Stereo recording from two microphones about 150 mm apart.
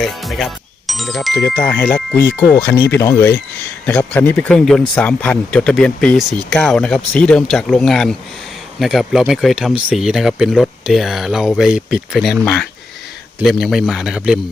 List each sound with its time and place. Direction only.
0.0 s speech: centre (ahead or behind)
1.5 s speech: 15° left (ahead or behind); by 14.3 s 5° right (ahead or behind)